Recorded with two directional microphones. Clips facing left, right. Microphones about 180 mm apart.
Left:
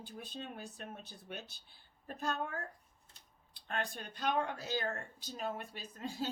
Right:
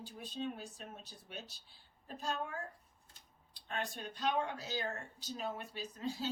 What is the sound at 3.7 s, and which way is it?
Speech, 55° left (ahead or behind).